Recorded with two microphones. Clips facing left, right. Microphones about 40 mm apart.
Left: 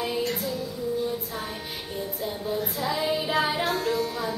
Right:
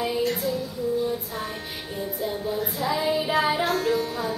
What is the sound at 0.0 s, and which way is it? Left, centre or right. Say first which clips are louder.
Music: right 3 dB; centre.